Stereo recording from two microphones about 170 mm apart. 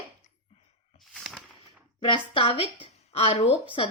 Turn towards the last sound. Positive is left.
turn(degrees=35)  # may be behind; listen again after turning